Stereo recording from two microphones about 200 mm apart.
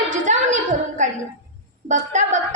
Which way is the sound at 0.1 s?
35° right (ahead or behind).